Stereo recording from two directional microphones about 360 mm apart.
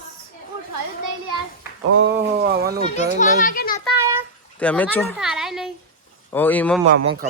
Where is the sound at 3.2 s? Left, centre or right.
Left.